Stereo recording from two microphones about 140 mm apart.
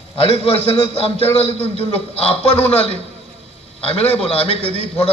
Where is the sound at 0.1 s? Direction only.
40° left (ahead or behind).